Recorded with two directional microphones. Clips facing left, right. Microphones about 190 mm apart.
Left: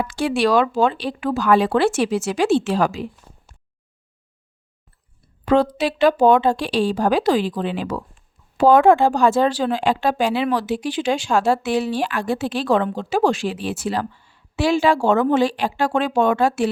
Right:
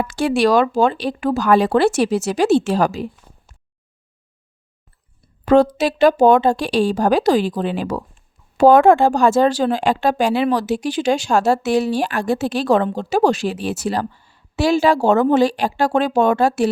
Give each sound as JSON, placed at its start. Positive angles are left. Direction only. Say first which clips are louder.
{"t": 0.0, "sound": "speech", "louder": "right 3 dB", "side_deg": -45}
{"t": 5.5, "sound": "speech", "louder": "right 4 dB", "side_deg": -45}